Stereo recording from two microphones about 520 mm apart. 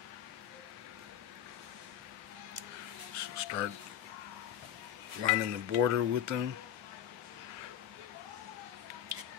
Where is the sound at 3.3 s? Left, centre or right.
Right.